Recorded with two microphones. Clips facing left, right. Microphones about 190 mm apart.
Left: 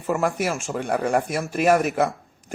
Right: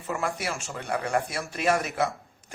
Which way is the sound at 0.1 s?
55° left (ahead or behind).